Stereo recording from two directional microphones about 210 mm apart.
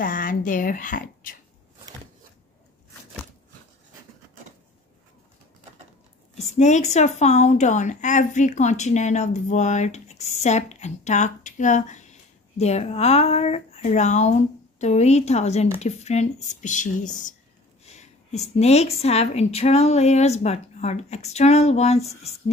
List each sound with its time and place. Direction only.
0.0 s speech: 40° left (ahead or behind)
6.3 s a woman's voice: 35° left (ahead or behind)
17.8 s a sound: 30° left (ahead or behind)
18.6 s a woman's voice: 30° left (ahead or behind)